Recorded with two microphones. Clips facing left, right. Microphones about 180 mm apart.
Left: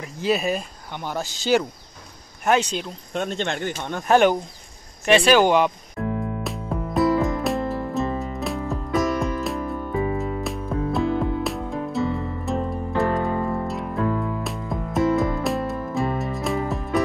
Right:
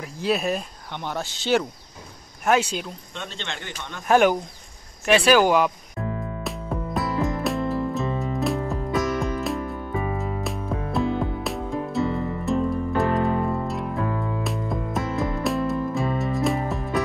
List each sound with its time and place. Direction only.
0.0 s speech: centre (ahead or behind)
3.2 s speech: 50° left (ahead or behind)
4.1 s speech: 5° right (ahead or behind)
5.0 s music: 5° right (ahead or behind)